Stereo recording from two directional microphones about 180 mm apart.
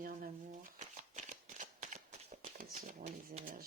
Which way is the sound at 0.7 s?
45° right (ahead or behind).